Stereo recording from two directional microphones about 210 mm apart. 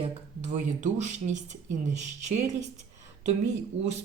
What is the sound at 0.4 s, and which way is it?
Speech, 35° right (ahead or behind).